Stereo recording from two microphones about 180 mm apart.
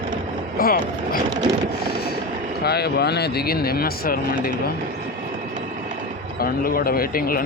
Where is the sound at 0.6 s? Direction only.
55° left (ahead or behind).